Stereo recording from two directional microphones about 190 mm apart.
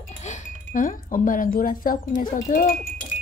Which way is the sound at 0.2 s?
40° left (ahead or behind).